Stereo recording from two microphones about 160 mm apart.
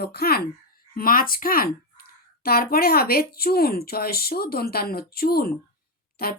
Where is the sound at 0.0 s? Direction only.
75° left (ahead or behind).